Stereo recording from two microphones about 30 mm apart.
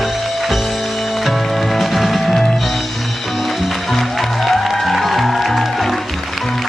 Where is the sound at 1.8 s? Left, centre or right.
Centre.